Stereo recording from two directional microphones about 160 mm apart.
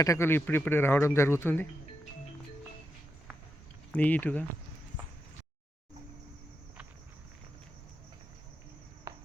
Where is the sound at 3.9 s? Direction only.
10° left (ahead or behind).